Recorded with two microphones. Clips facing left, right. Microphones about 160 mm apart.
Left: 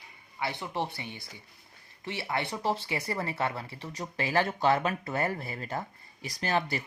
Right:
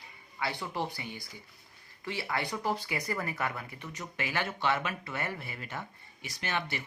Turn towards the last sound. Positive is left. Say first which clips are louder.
# left 5 dB
turn(degrees=35)  # may be behind; listen again after turning